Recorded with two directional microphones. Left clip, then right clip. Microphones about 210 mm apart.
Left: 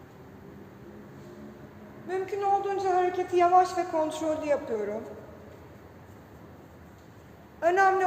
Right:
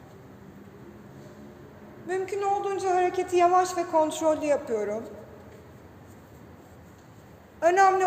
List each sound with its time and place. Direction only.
2.0 s speech: 40° right (ahead or behind)
7.6 s speech: 35° right (ahead or behind)